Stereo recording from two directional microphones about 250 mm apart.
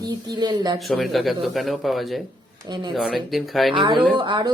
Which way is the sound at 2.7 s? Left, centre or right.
Centre.